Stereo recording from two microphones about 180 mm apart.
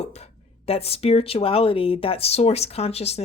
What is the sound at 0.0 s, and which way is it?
Speech, 35° left (ahead or behind).